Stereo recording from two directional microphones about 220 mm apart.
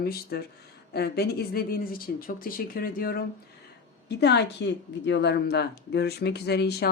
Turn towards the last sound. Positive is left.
turn(degrees=45)  # may be behind; listen again after turning